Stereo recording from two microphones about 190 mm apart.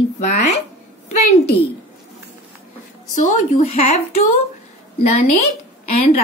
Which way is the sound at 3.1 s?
40° left (ahead or behind).